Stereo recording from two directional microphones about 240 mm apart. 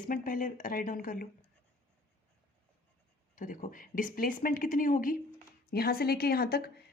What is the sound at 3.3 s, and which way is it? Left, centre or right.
Speech, left.